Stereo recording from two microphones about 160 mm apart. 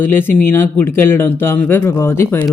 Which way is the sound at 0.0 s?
15° left (ahead or behind).